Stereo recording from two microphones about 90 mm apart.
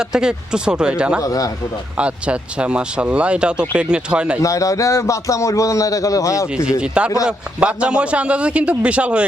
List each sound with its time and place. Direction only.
0.0 s a man's voice: 10° right (ahead or behind)
1.2 s a man's voice: 40° left (ahead or behind)
2.0 s a man's voice: 15° right (ahead or behind)
4.4 s a man's voice: 35° left (ahead or behind)
6.7 s a man's voice: 10° right (ahead or behind)